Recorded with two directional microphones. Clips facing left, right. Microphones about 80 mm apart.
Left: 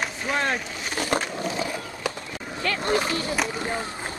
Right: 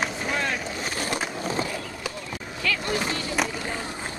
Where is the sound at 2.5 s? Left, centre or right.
Left.